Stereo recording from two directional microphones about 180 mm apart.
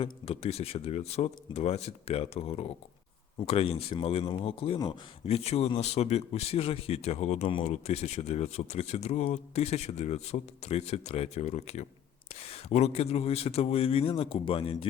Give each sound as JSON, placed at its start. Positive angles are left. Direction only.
{"t": 0.0, "sound": "speech", "side_deg": 35}